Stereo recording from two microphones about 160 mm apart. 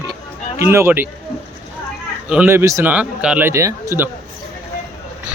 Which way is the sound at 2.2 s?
10° right (ahead or behind).